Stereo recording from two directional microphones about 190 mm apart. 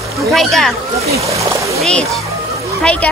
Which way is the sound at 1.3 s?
15° right (ahead or behind).